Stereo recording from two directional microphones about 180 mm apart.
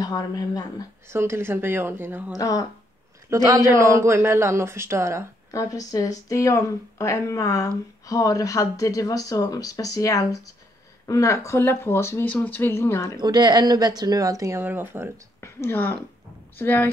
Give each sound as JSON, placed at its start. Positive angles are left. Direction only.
{"t": 0.0, "sound": "speech", "side_deg": 20}
{"t": 1.0, "sound": "a man's voice", "side_deg": -15}
{"t": 2.3, "sound": "speech", "side_deg": 20}
{"t": 3.3, "sound": "a man's voice", "side_deg": -15}
{"t": 5.5, "sound": "speech", "side_deg": 20}
{"t": 13.2, "sound": "a woman's voice", "side_deg": -25}
{"t": 15.4, "sound": "a woman's voice", "side_deg": 10}